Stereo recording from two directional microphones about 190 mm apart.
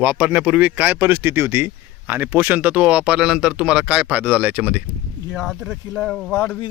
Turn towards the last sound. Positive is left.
turn(degrees=0)  # may be behind; listen again after turning